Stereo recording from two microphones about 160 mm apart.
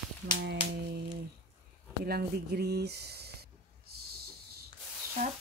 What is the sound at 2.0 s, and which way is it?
Speech, 75° right (ahead or behind).